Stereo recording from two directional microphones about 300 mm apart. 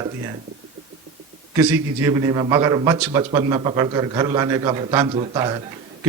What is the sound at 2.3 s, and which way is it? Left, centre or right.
A man's voice, centre.